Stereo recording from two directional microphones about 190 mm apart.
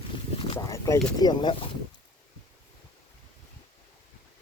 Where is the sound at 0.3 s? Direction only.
25° left (ahead or behind).